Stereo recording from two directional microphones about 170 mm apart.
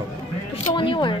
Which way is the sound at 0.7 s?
30° left (ahead or behind).